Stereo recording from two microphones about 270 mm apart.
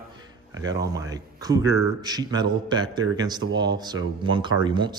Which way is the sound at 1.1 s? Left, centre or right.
Centre.